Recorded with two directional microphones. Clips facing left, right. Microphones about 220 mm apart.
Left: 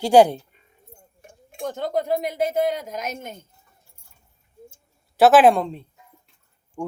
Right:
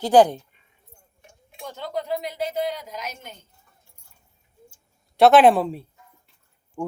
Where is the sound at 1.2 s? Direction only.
50° left (ahead or behind).